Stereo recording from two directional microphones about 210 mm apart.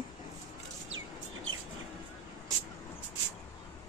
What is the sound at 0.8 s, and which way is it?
Bird, 65° right (ahead or behind).